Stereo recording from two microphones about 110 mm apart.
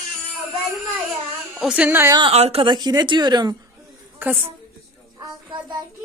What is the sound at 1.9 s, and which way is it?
Speech, 20° right (ahead or behind).